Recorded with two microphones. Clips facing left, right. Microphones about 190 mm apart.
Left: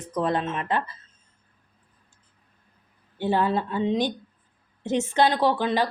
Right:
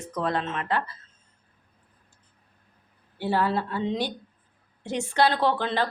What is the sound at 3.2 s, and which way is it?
Speech, 20° left (ahead or behind).